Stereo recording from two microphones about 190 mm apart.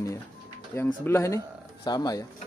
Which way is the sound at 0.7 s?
10° left (ahead or behind).